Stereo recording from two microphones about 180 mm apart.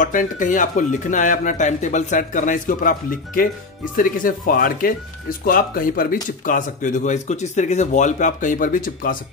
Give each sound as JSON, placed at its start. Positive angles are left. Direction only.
{"t": 0.0, "sound": "speech", "side_deg": 45}